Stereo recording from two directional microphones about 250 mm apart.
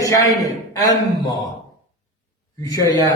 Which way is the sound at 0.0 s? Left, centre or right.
Centre.